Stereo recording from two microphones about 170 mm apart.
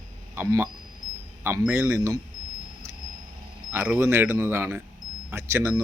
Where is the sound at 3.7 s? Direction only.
15° right (ahead or behind).